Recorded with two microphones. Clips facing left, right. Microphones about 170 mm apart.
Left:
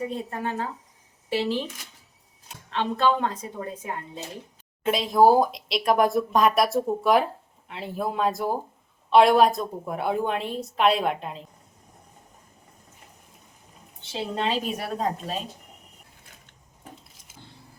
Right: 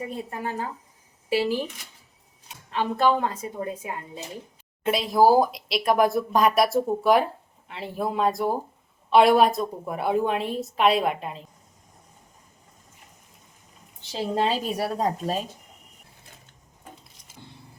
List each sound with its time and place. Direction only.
0.3 s speech: 10° right (ahead or behind)
2.6 s speech: 10° right (ahead or behind)
14.0 s a woman's voice: 35° right (ahead or behind)